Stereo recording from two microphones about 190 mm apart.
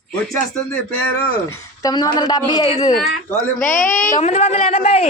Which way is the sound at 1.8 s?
20° left (ahead or behind).